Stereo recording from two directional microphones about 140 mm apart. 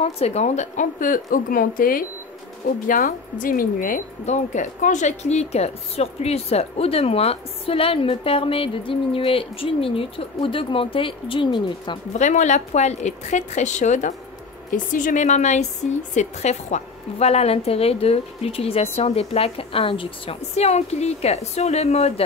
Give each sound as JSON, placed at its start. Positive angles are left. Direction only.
{"t": 0.0, "sound": "a woman's voice", "side_deg": 50}
{"t": 2.9, "sound": "a woman's voice", "side_deg": 65}
{"t": 4.3, "sound": "a woman's voice", "side_deg": 60}
{"t": 12.1, "sound": "a woman's voice", "side_deg": 55}
{"t": 14.7, "sound": "a woman's voice", "side_deg": 70}